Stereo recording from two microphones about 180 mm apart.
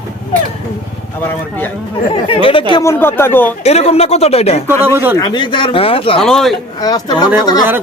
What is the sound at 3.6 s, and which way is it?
Speech, 35° left (ahead or behind).